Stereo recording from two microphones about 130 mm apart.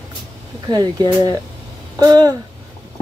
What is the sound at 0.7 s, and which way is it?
A woman's voice, 30° right (ahead or behind).